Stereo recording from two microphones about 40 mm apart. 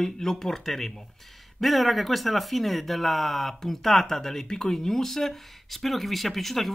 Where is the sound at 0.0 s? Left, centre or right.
Centre.